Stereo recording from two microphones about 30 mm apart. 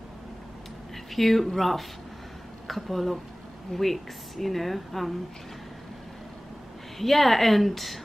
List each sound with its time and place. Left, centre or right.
1.1 s a woman's voice: centre
7.0 s a woman's voice: centre